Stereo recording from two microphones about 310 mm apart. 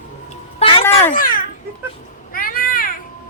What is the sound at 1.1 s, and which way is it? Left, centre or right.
Speech, left.